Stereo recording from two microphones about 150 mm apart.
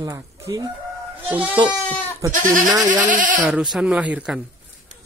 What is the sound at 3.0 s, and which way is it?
Speech, 60° right (ahead or behind).